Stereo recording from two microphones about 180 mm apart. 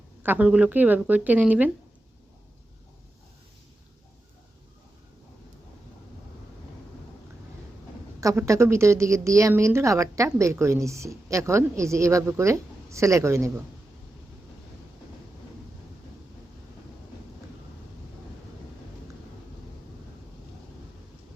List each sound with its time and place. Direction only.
0.2 s a woman's voice: 10° right (ahead or behind)
8.2 s a woman's voice: 15° right (ahead or behind)